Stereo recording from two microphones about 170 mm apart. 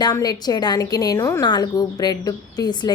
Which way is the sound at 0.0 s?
20° left (ahead or behind).